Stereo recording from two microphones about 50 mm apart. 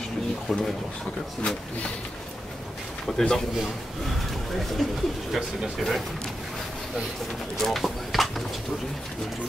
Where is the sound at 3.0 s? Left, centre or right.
Centre.